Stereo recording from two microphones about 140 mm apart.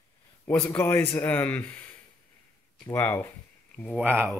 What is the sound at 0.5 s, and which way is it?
Speech, 10° left (ahead or behind).